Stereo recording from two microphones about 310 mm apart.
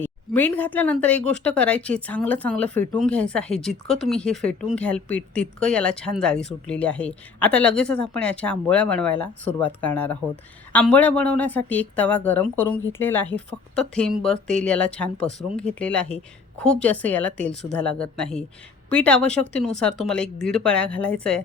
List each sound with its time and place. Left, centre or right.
0.0 s speech: centre